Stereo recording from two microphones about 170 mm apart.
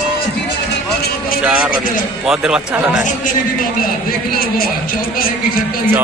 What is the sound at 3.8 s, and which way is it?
Speech, 60° left (ahead or behind).